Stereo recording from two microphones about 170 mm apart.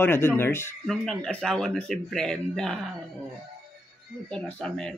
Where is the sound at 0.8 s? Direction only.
5° left (ahead or behind).